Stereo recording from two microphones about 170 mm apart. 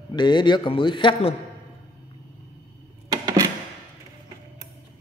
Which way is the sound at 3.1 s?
25° right (ahead or behind).